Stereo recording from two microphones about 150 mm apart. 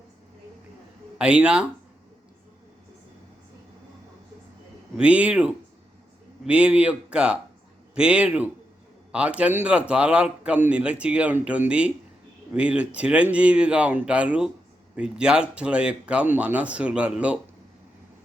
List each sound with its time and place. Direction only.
1.2 s speech: 5° right (ahead or behind)
4.9 s speech: 10° right (ahead or behind)